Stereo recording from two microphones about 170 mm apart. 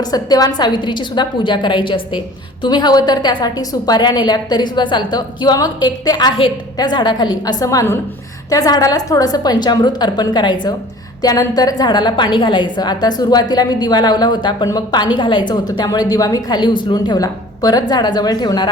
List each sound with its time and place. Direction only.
0.1 s a woman's voice: 20° left (ahead or behind)